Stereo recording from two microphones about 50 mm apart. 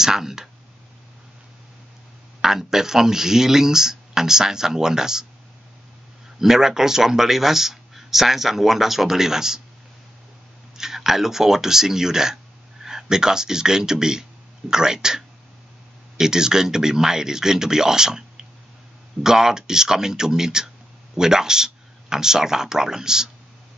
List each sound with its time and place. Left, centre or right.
0.0 s speech: centre
2.4 s speech: centre
6.4 s speech: centre
10.8 s speech: centre
19.2 s speech: centre